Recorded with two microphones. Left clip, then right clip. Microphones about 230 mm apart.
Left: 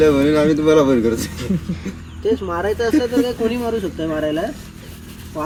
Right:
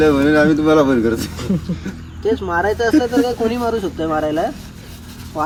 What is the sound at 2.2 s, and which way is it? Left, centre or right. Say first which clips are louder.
Speech: right 2 dB; centre.